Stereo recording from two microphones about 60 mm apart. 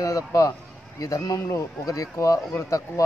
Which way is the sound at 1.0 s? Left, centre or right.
Left.